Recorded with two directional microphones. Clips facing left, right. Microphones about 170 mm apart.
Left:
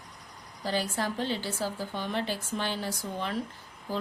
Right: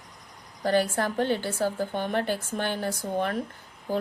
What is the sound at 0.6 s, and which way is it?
Speech, 55° right (ahead or behind).